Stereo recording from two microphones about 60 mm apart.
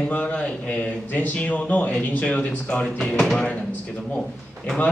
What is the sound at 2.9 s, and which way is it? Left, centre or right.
Speech, centre.